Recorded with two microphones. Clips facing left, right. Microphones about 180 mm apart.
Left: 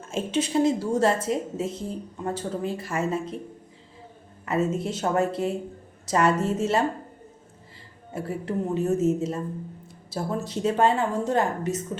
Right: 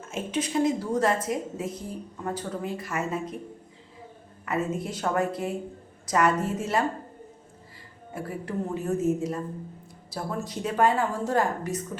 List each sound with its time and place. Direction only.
0.1 s a woman's voice: 25° left (ahead or behind)
4.4 s a woman's voice: 25° left (ahead or behind)
8.1 s a woman's voice: 25° left (ahead or behind)